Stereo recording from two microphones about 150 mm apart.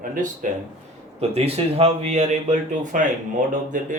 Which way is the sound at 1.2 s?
40° right (ahead or behind).